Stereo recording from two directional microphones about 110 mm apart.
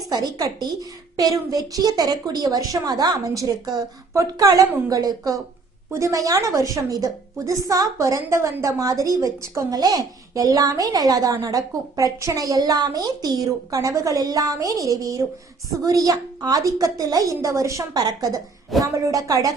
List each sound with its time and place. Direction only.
0.1 s a woman's voice: 40° right (ahead or behind)